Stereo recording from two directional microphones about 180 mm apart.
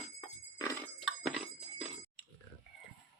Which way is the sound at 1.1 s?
Centre (ahead or behind).